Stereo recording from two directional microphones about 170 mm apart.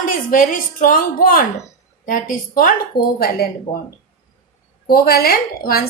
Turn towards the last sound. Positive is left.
turn(degrees=60)  # may be behind; listen again after turning